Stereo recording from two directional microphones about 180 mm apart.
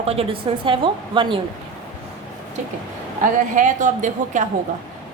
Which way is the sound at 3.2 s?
45° right (ahead or behind).